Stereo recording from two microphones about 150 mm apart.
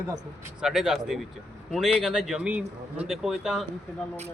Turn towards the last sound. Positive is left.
turn(degrees=-5)  # may be behind; listen again after turning